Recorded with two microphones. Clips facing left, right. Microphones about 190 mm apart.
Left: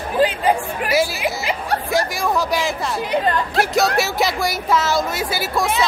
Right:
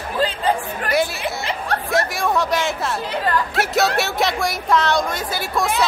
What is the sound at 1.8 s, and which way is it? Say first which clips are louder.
Music: right 1 dB; centre (ahead or behind).